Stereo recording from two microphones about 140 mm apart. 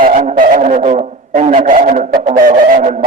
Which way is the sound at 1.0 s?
60° right (ahead or behind).